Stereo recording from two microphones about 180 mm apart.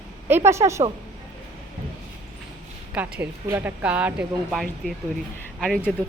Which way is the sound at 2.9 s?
10° right (ahead or behind).